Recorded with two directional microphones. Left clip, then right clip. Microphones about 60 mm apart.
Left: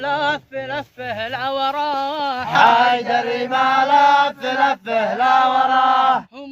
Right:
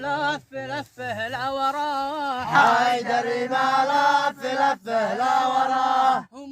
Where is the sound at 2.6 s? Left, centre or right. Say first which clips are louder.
Left 6 dB; right.